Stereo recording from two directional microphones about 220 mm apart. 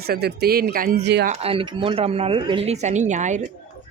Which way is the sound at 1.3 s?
25° right (ahead or behind).